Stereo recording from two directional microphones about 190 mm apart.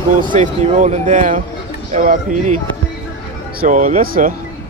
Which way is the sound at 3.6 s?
40° right (ahead or behind).